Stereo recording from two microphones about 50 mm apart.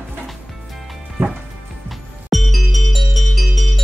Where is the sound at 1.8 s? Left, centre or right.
Centre.